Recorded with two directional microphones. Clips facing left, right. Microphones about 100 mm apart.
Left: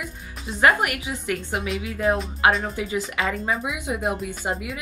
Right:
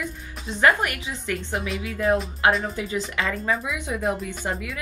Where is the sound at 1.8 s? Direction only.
30° left (ahead or behind).